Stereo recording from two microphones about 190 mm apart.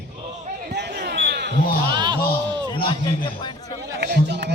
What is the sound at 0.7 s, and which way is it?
Basketball bounce, 65° right (ahead or behind).